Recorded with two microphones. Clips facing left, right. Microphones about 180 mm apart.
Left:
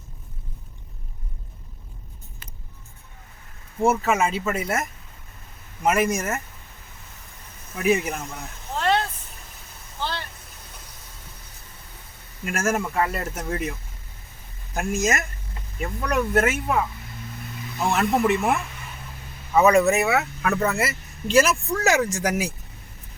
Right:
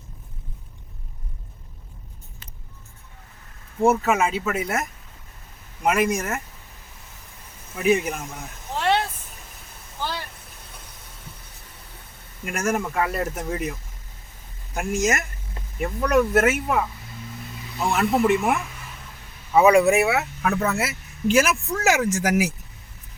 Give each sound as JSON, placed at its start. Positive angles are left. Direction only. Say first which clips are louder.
{"t": 3.8, "sound": "speech", "louder": "right 1 dB", "side_deg": 0}
{"t": 7.8, "sound": "speech", "louder": "right 1 dB", "side_deg": 0}
{"t": 8.7, "sound": "vehicle", "louder": "even", "side_deg": -15}
{"t": 12.5, "sound": "speech", "louder": "even", "side_deg": 5}
{"t": 14.7, "sound": "speech", "louder": "right 1 dB", "side_deg": 0}
{"t": 19.5, "sound": "speech", "louder": "right 2 dB", "side_deg": -10}